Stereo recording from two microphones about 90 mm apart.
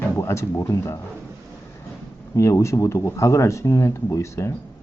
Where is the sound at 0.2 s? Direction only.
35° left (ahead or behind).